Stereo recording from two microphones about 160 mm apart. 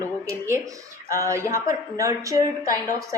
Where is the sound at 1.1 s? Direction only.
20° right (ahead or behind).